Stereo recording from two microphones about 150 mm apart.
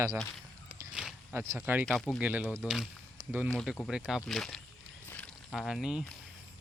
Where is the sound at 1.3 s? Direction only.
20° right (ahead or behind).